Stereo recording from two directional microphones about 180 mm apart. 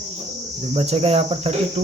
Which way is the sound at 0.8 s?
35° right (ahead or behind).